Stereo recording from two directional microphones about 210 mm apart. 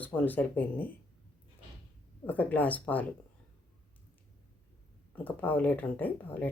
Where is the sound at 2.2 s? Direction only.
10° left (ahead or behind).